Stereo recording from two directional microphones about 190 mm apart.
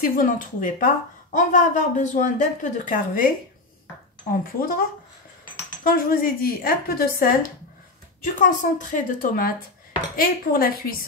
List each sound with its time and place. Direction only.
0.0 s speech: 45° left (ahead or behind)
4.3 s speech: 50° left (ahead or behind)
5.9 s speech: 50° left (ahead or behind)